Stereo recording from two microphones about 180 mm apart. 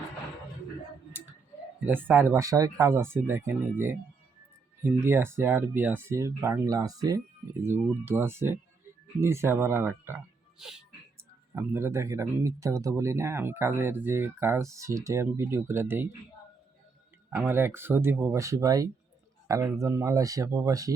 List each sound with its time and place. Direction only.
1.8 s speech: 10° right (ahead or behind)
11.5 s speech: 15° right (ahead or behind)
17.3 s speech: 15° right (ahead or behind)